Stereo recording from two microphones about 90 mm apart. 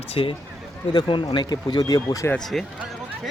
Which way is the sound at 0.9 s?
65° left (ahead or behind).